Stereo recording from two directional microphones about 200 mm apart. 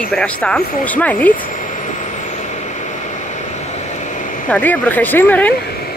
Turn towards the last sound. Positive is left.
turn(degrees=10)  # may be behind; listen again after turning